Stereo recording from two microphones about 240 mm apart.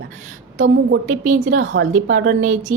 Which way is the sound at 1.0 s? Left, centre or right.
Right.